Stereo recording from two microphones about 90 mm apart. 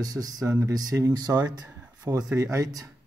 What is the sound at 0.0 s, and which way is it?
Speech, 45° right (ahead or behind).